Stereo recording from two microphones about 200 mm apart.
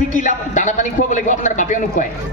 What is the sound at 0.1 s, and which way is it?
A man's voice, 40° left (ahead or behind).